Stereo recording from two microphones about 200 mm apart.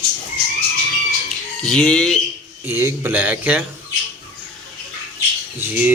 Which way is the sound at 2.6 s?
10° right (ahead or behind).